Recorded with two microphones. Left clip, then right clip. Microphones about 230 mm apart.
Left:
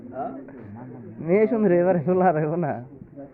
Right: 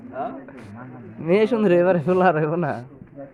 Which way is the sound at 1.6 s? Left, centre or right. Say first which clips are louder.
Right 2 dB; right.